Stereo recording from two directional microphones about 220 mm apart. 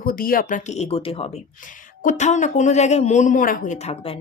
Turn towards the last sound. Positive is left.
turn(degrees=25)  # may be behind; listen again after turning